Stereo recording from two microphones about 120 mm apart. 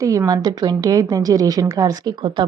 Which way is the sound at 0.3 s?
35° right (ahead or behind).